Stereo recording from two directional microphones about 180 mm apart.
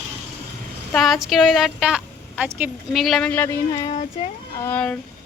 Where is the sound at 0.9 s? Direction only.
Centre (ahead or behind).